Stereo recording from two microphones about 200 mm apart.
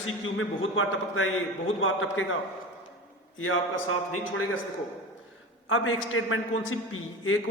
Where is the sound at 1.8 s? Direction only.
80° left.